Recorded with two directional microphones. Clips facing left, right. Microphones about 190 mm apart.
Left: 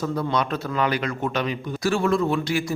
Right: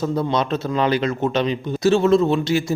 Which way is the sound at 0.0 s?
25° right (ahead or behind).